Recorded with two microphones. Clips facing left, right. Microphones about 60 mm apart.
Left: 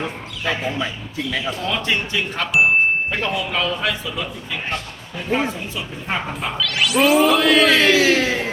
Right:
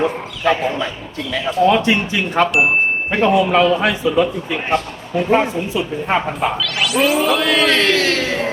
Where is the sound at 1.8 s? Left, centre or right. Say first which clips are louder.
Right 4 dB; centre.